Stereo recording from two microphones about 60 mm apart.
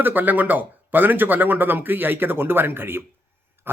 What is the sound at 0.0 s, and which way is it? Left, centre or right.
Speech, right.